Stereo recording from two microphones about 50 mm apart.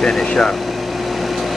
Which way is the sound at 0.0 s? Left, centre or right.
Centre.